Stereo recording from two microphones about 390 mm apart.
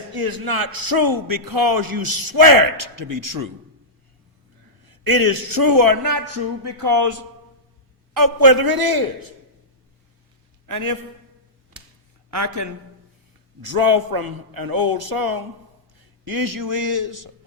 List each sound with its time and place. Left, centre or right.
0.3 s a man's voice: right
4.9 s a man's voice: right
10.7 s a man's voice: right
12.6 s a man's voice: right
13.6 s a man's voice: right